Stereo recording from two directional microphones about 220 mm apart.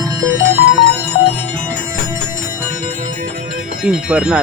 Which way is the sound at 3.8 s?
5° right (ahead or behind).